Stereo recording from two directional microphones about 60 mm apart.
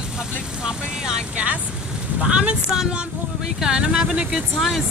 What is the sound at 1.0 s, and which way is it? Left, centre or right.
Speech, right.